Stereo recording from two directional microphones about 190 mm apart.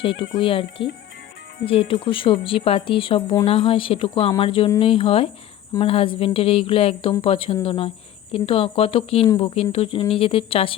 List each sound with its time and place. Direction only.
0.0 s speech: 30° left (ahead or behind)
1.9 s speech: 25° left (ahead or behind)